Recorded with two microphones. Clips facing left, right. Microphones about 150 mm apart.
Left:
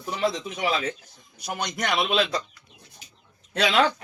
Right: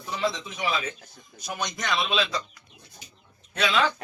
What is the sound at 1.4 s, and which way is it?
Speech, 60° left (ahead or behind).